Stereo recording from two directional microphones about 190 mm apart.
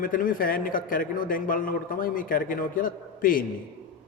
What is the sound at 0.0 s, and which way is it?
A man's voice, 45° left (ahead or behind).